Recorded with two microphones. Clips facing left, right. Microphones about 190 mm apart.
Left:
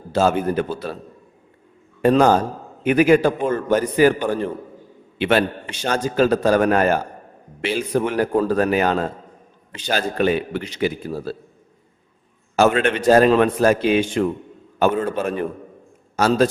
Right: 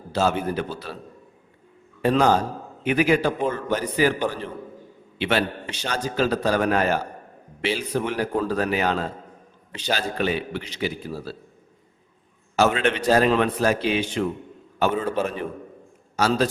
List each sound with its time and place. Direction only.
0.1 s a man's voice: 50° left (ahead or behind)
2.0 s a man's voice: 50° left (ahead or behind)
5.1 s a man's voice: 50° left (ahead or behind)
12.5 s a man's voice: 50° left (ahead or behind)